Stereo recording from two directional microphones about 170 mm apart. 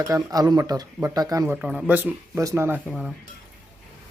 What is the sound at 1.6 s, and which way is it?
A man's voice, 5° right (ahead or behind).